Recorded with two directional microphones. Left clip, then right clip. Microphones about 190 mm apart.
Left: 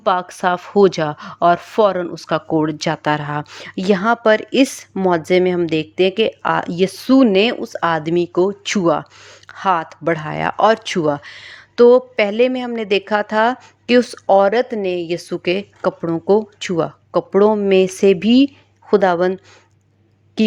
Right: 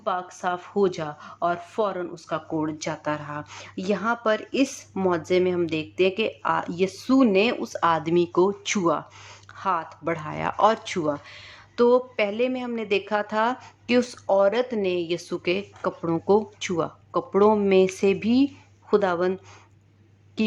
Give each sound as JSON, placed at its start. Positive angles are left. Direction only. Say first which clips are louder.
{"t": 0.0, "sound": "speech", "louder": "left 10 dB", "side_deg": 45}
{"t": 16.0, "sound": "speech", "louder": "left 4 dB", "side_deg": 20}